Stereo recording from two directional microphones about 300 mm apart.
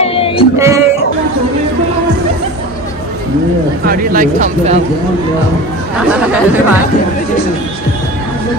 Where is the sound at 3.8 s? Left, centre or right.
Right.